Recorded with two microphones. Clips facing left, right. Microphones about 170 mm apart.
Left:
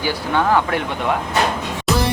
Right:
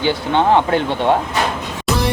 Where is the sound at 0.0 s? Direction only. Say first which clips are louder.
Right 3 dB; 25° right (ahead or behind).